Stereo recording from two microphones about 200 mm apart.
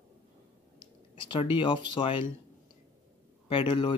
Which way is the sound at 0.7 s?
25° left (ahead or behind).